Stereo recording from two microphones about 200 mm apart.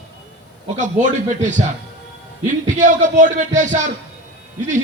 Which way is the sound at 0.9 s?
40° right (ahead or behind).